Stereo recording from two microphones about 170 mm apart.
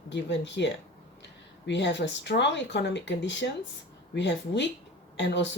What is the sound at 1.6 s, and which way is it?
Speech, 90° left.